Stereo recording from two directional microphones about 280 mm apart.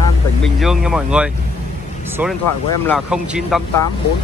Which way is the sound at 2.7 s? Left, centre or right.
Centre.